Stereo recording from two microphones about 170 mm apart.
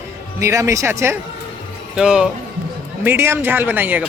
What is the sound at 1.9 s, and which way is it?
Speech, 5° right (ahead or behind).